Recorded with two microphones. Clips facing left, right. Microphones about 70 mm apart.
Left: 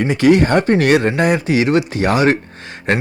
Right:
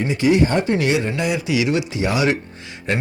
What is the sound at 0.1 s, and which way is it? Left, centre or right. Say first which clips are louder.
Speech: left 4 dB; left.